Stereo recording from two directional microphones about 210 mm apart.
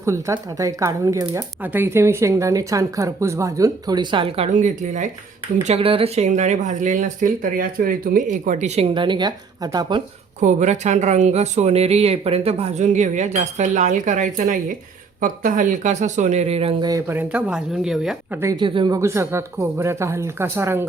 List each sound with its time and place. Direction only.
0.0 s speech: 15° right (ahead or behind)
10.4 s speech: 35° right (ahead or behind)
16.9 s speech: 10° right (ahead or behind)
18.3 s speech: 20° right (ahead or behind)